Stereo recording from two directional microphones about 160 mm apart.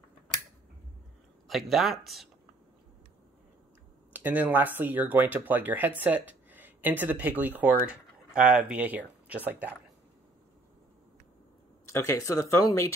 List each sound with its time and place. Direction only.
1.5 s speech: centre (ahead or behind)
4.1 s speech: 10° right (ahead or behind)
11.9 s speech: 20° left (ahead or behind)